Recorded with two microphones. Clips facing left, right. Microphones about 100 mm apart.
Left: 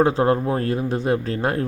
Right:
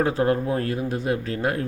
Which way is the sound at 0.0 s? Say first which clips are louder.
Left 4 dB; 25° left (ahead or behind).